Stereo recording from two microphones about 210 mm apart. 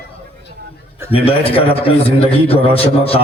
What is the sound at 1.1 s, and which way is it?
A man's voice, 25° left (ahead or behind).